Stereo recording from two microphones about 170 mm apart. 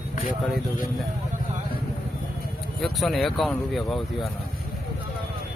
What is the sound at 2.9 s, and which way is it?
Speech, centre (ahead or behind).